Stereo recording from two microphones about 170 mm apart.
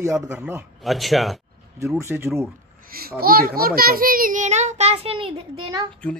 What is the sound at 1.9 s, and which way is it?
Speech, 15° right (ahead or behind).